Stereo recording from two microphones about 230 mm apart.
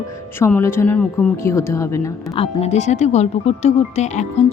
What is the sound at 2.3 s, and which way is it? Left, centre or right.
Speech, left.